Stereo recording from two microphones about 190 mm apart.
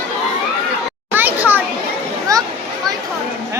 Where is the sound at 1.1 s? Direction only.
10° right (ahead or behind).